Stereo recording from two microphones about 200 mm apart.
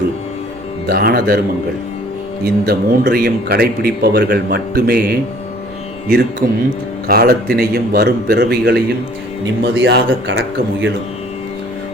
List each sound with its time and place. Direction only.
0.9 s speech: 50° right (ahead or behind)
2.4 s speech: 50° right (ahead or behind)
6.4 s speech: 45° right (ahead or behind)
9.7 s speech: 65° right (ahead or behind)